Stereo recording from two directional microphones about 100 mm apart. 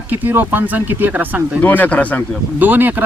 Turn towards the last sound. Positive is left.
turn(degrees=-20)  # may be behind; listen again after turning